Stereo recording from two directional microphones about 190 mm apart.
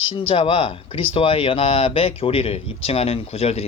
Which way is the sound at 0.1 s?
30° left (ahead or behind).